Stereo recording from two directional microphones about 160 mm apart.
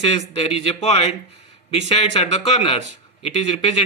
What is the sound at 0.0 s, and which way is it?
Speech, 40° left (ahead or behind).